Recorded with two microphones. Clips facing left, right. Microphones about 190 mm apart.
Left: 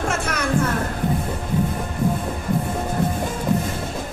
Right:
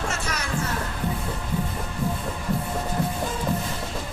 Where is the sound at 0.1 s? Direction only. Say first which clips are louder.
Left 6 dB; 55° left (ahead or behind).